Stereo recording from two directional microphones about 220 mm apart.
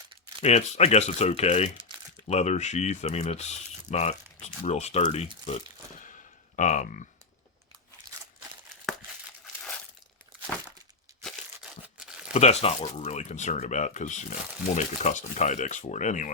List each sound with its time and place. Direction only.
0.4 s speech: 30° left (ahead or behind)
6.6 s speech: 35° left (ahead or behind)
11.9 s crumpling: 5° right (ahead or behind)
12.3 s speech: 30° left (ahead or behind)